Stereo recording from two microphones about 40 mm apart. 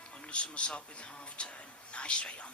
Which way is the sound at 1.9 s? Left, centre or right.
Left.